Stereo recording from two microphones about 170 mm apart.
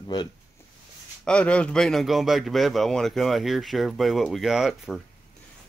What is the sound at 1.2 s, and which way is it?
Speech, 5° left (ahead or behind).